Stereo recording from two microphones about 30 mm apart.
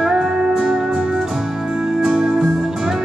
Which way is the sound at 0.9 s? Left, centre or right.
Right.